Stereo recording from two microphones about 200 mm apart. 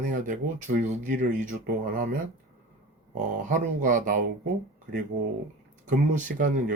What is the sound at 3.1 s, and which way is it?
Speech, 40° right (ahead or behind).